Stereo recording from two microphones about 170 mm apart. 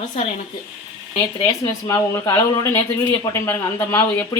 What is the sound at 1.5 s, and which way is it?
Speech, 20° left (ahead or behind).